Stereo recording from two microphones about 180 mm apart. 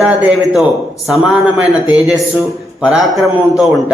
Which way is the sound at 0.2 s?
5° right (ahead or behind).